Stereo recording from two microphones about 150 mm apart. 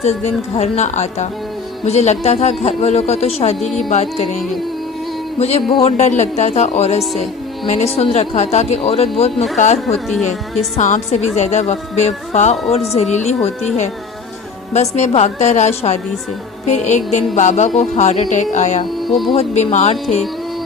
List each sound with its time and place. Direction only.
0.0 s a man's voice: 45° left (ahead or behind)
5.4 s a man's voice: 45° left (ahead or behind)
10.8 s a man's voice: 55° left (ahead or behind)
19.0 s music: centre (ahead or behind)
19.3 s a man's voice: 45° left (ahead or behind)